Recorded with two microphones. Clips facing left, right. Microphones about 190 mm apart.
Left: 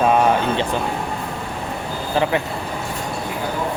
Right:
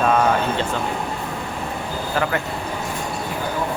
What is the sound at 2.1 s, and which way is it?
Speech, 20° left (ahead or behind).